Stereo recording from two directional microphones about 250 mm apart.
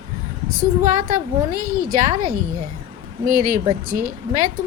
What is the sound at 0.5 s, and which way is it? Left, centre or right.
A woman's voice, right.